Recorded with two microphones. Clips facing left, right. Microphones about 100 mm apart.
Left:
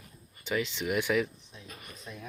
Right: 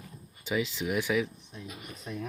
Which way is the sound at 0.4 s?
5° right (ahead or behind).